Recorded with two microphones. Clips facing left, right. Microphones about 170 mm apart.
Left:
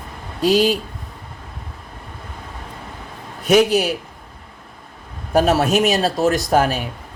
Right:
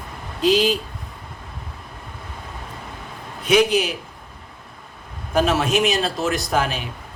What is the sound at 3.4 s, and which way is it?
Speech, 45° left (ahead or behind).